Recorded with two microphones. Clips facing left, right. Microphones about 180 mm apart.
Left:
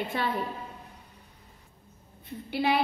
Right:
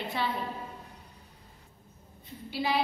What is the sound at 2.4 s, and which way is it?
Speech, 60° left (ahead or behind).